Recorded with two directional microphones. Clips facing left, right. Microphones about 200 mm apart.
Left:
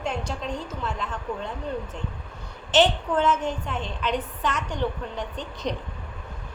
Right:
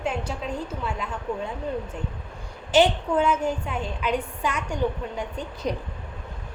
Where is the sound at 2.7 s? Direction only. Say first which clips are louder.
Right 1 dB; 10° right (ahead or behind).